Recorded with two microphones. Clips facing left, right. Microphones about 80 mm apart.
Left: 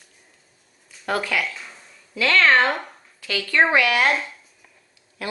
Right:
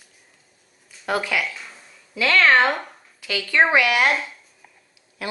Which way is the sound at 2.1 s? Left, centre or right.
Centre.